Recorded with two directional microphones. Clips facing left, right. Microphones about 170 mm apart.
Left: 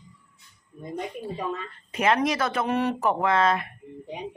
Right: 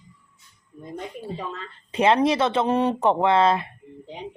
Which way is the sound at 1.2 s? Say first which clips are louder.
Left 2 dB; 30° right (ahead or behind).